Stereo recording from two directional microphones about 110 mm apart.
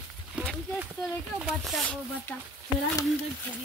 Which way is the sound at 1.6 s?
5° left (ahead or behind).